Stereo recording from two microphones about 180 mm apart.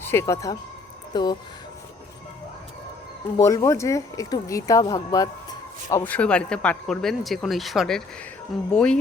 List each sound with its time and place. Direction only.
0.0 s speech: 15° left (ahead or behind)
3.3 s speech: 15° left (ahead or behind)
6.1 s speech: 5° left (ahead or behind)